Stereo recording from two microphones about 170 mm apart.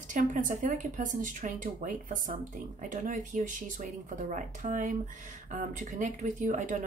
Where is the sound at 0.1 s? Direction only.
50° right (ahead or behind).